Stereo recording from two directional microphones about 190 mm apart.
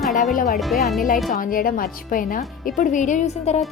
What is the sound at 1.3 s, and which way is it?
A woman's voice, 50° left (ahead or behind).